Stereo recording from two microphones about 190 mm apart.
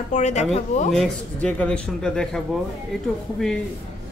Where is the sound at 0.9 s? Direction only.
5° left (ahead or behind).